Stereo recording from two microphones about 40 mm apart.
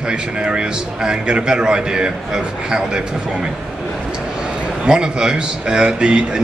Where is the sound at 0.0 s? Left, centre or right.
Right.